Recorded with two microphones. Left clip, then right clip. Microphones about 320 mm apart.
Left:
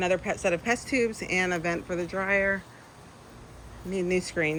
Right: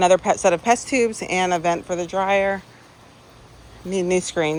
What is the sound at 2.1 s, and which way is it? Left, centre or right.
Speech, centre.